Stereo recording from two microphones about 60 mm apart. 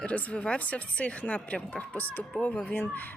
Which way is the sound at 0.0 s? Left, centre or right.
Left.